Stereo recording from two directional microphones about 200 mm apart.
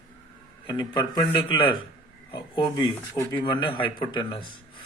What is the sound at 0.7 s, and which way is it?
Speech, 20° left (ahead or behind).